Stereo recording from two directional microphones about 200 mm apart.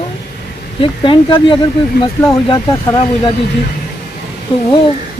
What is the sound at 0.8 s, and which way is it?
Speech, 25° left (ahead or behind).